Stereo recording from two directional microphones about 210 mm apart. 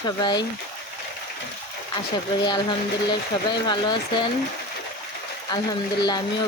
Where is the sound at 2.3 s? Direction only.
20° left (ahead or behind).